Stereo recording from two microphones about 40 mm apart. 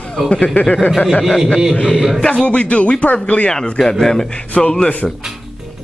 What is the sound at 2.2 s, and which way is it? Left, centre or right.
Speech, left.